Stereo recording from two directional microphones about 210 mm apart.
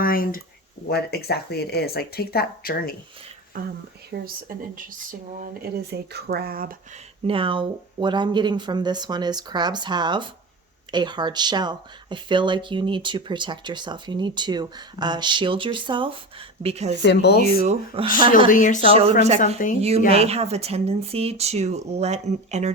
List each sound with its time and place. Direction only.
0.0 s speech: 45° left (ahead or behind)
3.6 s speech: 40° right (ahead or behind)
7.3 s speech: 25° right (ahead or behind)
17.0 s speech: 55° left (ahead or behind)
17.4 s speech: 30° right (ahead or behind)
18.4 s speech: 40° left (ahead or behind)
20.1 s speech: 30° right (ahead or behind)